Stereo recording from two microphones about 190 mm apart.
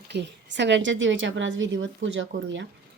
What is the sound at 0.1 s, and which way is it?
Speech, 65° right (ahead or behind).